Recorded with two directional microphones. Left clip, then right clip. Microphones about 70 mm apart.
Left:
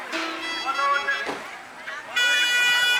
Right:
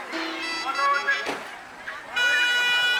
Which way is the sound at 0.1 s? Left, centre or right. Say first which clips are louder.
Left 2 dB; left.